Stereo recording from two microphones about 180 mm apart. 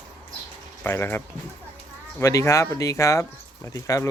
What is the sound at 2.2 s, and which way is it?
Speech, 15° left (ahead or behind).